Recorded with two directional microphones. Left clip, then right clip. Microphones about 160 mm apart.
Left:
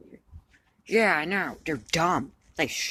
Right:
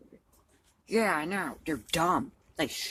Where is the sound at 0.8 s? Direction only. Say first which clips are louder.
Left 5 dB; 20° left (ahead or behind).